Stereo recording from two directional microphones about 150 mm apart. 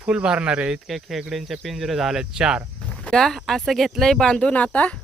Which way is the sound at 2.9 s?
5° left (ahead or behind).